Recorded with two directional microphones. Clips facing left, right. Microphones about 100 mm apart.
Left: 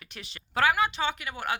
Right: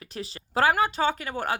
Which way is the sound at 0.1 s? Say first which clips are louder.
Right 5 dB; 35° right (ahead or behind).